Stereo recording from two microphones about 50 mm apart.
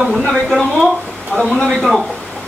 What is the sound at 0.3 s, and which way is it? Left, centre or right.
A man's voice, centre.